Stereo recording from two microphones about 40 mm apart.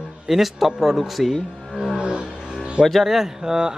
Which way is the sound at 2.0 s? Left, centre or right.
Right.